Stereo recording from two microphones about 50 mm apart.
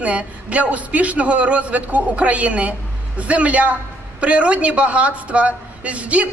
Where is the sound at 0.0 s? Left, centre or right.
Right.